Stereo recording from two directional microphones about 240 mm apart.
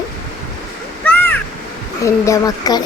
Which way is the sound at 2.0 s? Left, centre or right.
Centre.